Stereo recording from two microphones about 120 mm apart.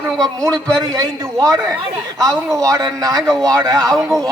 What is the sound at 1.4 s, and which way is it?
A man's voice, 30° right (ahead or behind).